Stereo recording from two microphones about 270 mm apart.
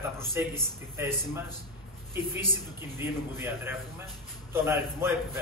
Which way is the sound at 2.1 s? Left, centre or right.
Centre.